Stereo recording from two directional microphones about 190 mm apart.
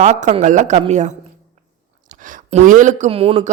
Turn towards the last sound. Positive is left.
turn(degrees=-30)  # may be behind; listen again after turning